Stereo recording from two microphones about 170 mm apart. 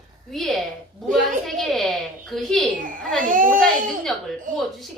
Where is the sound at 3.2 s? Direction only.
50° right (ahead or behind).